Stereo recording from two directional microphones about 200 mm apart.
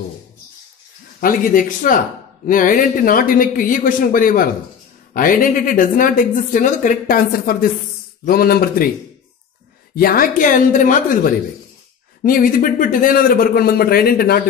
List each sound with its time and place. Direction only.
1.2 s a woman's voice: 45° left (ahead or behind)
9.9 s a woman's voice: 45° left (ahead or behind)
12.2 s a woman's voice: 45° left (ahead or behind)